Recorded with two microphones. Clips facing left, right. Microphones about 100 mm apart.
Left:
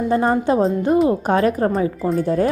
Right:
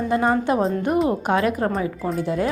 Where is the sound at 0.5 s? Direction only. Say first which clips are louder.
Left 4 dB; 35° left (ahead or behind).